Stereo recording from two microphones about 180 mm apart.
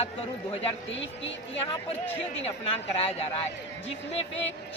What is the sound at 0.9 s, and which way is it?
Speech, 90° left.